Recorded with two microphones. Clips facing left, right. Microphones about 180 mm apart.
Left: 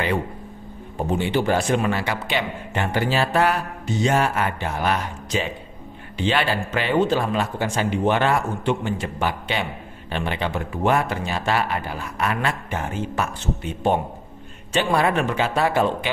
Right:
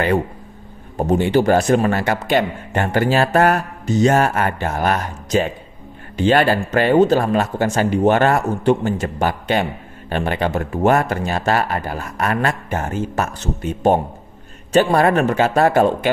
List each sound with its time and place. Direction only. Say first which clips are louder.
0.9 s speech: right 6 dB; 45° right (ahead or behind)